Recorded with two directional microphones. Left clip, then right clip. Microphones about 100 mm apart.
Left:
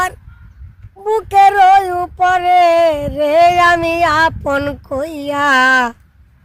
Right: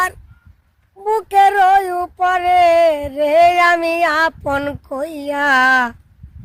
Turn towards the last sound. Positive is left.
turn(degrees=-30)  # may be behind; listen again after turning